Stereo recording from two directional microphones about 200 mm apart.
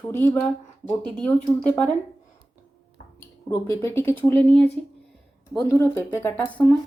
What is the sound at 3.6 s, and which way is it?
Speech, 10° left (ahead or behind).